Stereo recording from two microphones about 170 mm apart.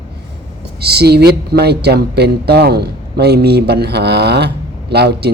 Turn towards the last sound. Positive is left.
turn(degrees=-75)  # may be behind; listen again after turning